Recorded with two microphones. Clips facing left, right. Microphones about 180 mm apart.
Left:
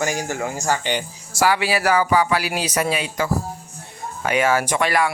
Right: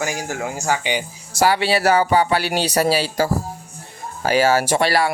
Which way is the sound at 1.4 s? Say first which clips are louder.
Right 2 dB; 30° right (ahead or behind).